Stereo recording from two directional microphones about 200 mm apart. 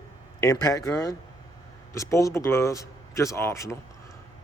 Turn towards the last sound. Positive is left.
turn(degrees=15)  # may be behind; listen again after turning